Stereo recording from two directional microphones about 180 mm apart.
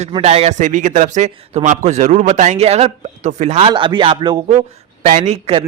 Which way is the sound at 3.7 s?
25° right (ahead or behind).